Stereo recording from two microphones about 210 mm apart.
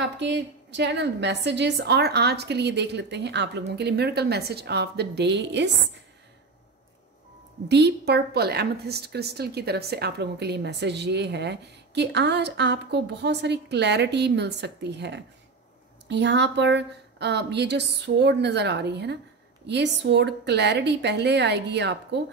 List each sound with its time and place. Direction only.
0.0 s a woman's voice: 55° right (ahead or behind)
7.6 s a woman's voice: 55° right (ahead or behind)